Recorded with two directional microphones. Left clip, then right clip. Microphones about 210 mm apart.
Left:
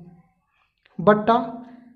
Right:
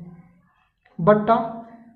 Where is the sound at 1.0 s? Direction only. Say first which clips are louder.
Even; 30° left (ahead or behind).